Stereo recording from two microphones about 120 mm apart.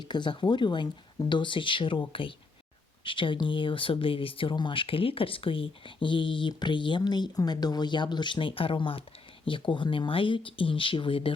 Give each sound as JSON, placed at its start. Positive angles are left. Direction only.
{"t": 0.0, "sound": "speech", "side_deg": 40}